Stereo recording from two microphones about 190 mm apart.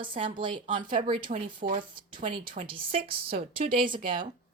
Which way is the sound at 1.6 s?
40° right (ahead or behind).